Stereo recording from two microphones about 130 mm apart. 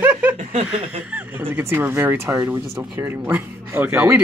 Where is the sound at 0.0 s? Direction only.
10° right (ahead or behind).